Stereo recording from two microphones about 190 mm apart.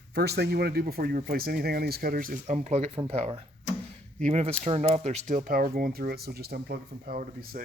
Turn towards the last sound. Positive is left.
turn(degrees=-50)  # may be behind; listen again after turning